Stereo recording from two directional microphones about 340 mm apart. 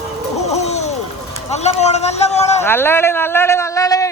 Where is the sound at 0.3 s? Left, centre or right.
Centre.